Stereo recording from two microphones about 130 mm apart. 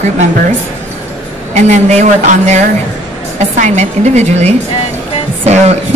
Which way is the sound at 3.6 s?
65° right (ahead or behind).